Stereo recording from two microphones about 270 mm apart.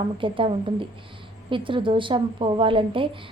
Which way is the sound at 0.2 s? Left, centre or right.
Centre.